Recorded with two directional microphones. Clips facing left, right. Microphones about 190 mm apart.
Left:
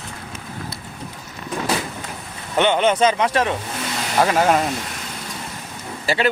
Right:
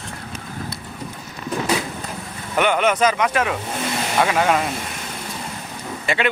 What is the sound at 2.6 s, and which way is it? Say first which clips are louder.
A man's voice: left 1 dB; 25° left (ahead or behind).